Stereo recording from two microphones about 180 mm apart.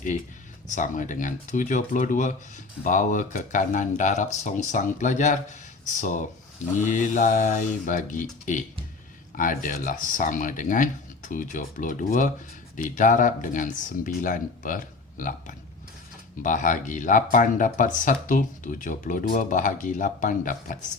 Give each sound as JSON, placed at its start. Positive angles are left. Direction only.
{"t": 0.8, "sound": "speech", "side_deg": 45}